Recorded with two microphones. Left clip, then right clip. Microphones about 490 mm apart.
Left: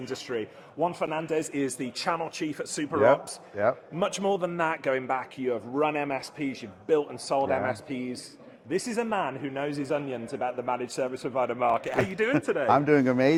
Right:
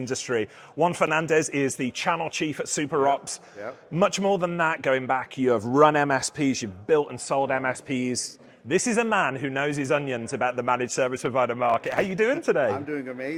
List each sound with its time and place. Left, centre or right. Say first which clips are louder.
0.0 s a man's voice: right 6 dB; right
3.6 s speech: left 12 dB; left
4.0 s a man's voice: right 5 dB; right
5.5 s speech: right 9 dB; right
6.8 s a man's voice: right 3 dB; right
12.6 s speech: left 6 dB; left